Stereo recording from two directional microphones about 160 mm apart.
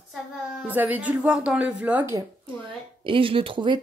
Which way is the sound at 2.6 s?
35° right (ahead or behind).